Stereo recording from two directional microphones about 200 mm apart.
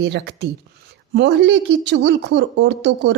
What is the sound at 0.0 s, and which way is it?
Speech, 55° right (ahead or behind).